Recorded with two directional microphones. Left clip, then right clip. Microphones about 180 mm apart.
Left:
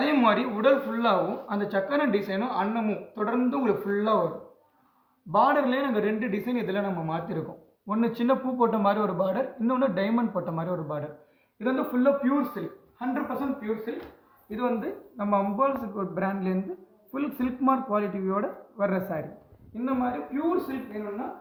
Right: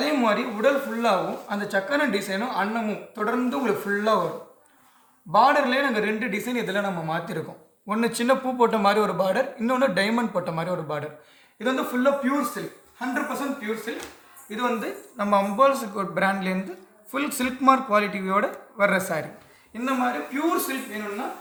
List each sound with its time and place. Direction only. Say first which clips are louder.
0.2 s speech: even; 30° right (ahead or behind)
5.3 s a man's voice: right 4 dB; 45° right (ahead or behind); by 8.6 s 30° right (ahead or behind)
8.6 s a man's voice: right 4 dB; 40° right (ahead or behind)
11.6 s speech: right 2 dB; 20° right (ahead or behind)